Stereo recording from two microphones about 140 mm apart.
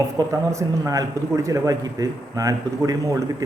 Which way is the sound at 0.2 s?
20° right (ahead or behind).